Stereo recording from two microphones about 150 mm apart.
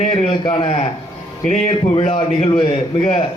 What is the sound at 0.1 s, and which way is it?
Speech, 35° left (ahead or behind).